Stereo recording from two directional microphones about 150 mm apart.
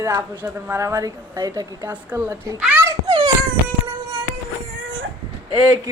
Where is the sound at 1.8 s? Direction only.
10° right (ahead or behind).